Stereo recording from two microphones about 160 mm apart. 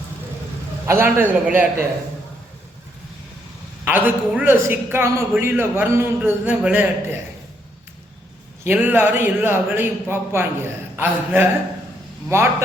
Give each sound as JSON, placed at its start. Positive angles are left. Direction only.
{"t": 0.9, "sound": "speech", "side_deg": -15}
{"t": 3.8, "sound": "speech", "side_deg": -10}
{"t": 8.6, "sound": "speech", "side_deg": -10}